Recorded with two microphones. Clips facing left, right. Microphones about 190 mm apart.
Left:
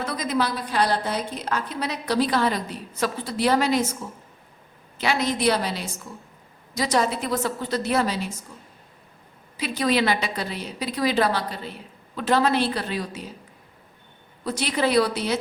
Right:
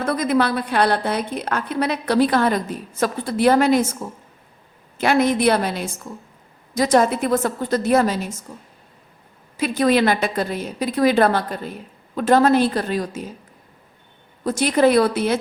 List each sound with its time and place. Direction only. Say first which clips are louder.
0.0 s a woman's voice: right 6 dB; 55° right (ahead or behind)
4.9 s a woman's voice: right 7 dB; 50° right (ahead or behind)
9.6 s a woman's voice: right 5 dB; 50° right (ahead or behind)
14.4 s a woman's voice: right 8 dB; 45° right (ahead or behind)